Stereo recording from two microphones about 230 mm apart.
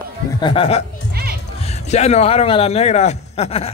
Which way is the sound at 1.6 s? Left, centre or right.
Left.